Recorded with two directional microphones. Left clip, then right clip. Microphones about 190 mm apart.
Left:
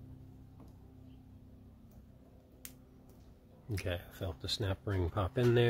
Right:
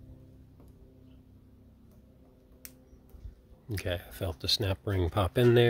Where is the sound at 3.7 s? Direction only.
35° right (ahead or behind).